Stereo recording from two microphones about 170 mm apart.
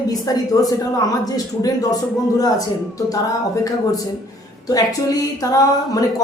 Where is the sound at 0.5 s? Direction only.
20° left (ahead or behind).